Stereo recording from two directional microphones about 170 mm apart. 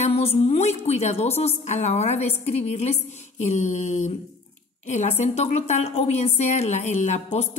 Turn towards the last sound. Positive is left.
turn(degrees=45)  # may be behind; listen again after turning